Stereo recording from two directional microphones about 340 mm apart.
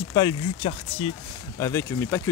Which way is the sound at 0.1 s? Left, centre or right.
Centre.